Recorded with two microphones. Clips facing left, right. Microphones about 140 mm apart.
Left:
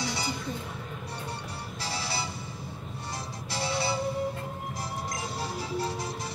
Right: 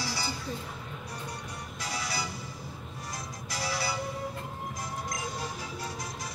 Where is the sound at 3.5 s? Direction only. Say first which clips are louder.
Left 3 dB; 25° left (ahead or behind).